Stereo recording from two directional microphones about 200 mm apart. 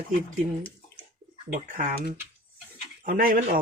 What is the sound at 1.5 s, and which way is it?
Speech, 45° right (ahead or behind).